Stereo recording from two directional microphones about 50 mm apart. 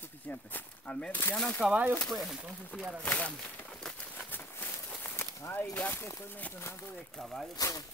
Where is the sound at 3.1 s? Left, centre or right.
Left.